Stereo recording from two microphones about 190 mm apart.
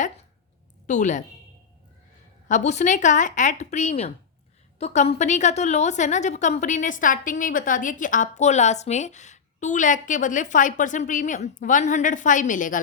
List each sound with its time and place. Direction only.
0.9 s a woman's voice: 40° left (ahead or behind)
2.5 s a woman's voice: 40° left (ahead or behind)